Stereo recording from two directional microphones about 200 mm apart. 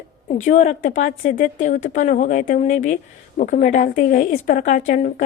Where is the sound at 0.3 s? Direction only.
35° left (ahead or behind).